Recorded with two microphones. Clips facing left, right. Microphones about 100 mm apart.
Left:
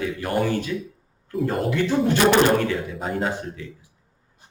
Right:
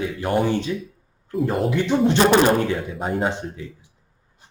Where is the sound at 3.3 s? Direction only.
25° right (ahead or behind).